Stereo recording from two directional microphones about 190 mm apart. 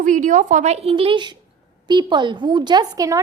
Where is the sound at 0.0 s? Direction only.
40° right (ahead or behind).